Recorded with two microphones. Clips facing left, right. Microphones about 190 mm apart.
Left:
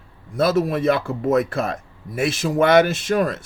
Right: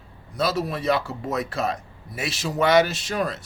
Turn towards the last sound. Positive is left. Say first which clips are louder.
# left 6 dB
turn(degrees=50)  # may be behind; listen again after turning